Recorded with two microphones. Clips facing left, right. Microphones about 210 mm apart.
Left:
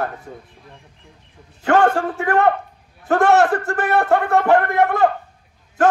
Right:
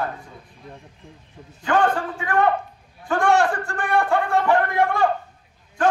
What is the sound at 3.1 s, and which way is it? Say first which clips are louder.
A man's voice: left 4 dB; 65° left (ahead or behind).